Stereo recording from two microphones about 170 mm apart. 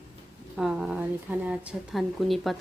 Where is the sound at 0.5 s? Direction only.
5° right (ahead or behind).